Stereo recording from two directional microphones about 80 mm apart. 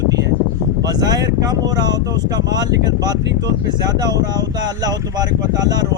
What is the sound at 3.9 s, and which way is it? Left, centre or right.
Speech, right.